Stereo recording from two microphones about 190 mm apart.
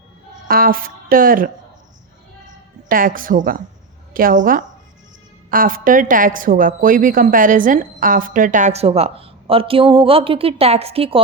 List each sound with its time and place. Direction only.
0.4 s a woman's voice: 50° right (ahead or behind)
2.9 s a woman's voice: 45° right (ahead or behind); by 11.2 s 30° right (ahead or behind)